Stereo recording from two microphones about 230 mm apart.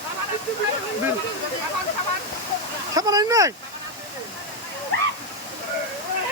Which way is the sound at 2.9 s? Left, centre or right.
Centre.